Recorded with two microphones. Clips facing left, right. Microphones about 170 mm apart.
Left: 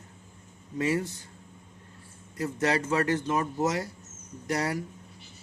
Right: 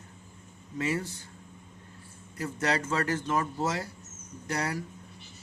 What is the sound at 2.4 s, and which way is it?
Speech, 25° left (ahead or behind).